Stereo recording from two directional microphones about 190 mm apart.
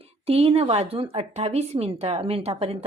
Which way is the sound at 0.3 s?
30° right (ahead or behind).